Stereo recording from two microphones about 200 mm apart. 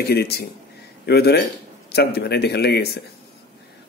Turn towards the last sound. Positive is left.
turn(degrees=55)  # may be behind; listen again after turning